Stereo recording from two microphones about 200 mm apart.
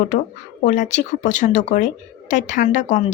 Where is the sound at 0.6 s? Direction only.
40° left (ahead or behind).